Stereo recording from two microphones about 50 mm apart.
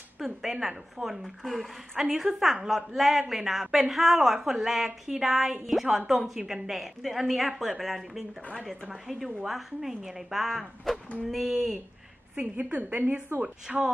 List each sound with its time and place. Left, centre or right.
0.2 s a woman's voice: centre
12.4 s a woman's voice: right
13.7 s a woman's voice: centre